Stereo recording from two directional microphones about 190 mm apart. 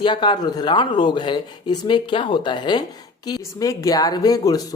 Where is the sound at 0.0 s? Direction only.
25° left (ahead or behind).